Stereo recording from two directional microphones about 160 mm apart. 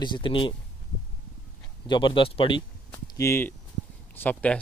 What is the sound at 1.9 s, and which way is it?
Speech, 30° left (ahead or behind).